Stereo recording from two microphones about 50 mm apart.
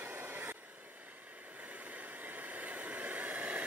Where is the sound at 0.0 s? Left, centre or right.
Right.